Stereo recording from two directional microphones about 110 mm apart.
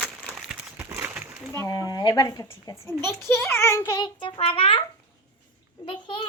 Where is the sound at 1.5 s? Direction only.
35° left (ahead or behind).